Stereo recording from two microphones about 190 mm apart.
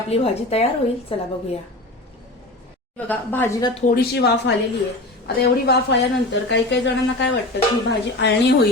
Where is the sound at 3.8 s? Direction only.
55° left (ahead or behind).